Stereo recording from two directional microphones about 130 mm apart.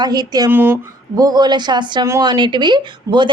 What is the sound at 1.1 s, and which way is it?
Speech, 30° right (ahead or behind).